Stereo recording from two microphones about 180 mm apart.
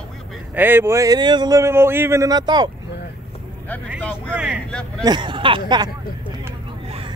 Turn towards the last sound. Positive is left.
turn(degrees=-25)  # may be behind; listen again after turning